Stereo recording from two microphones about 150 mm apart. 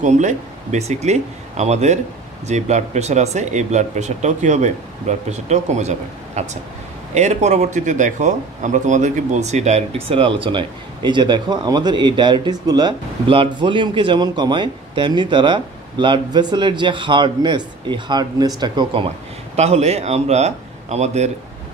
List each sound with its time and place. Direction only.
0.0 s a man's voice: 55° right (ahead or behind); by 19.0 s 30° right (ahead or behind)
19.5 s speech: 45° right (ahead or behind)